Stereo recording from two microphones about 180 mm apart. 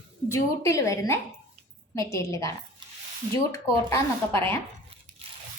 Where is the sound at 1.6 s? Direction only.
35° right (ahead or behind).